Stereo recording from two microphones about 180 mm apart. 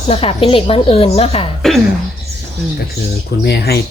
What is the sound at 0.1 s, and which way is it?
A woman's voice, 35° left (ahead or behind).